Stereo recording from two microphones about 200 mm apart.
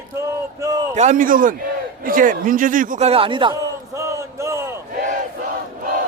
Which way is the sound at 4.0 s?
15° right (ahead or behind).